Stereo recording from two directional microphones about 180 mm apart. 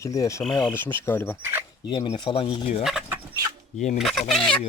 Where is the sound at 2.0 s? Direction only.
25° left (ahead or behind).